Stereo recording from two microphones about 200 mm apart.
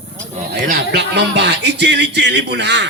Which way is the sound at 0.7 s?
55° right (ahead or behind).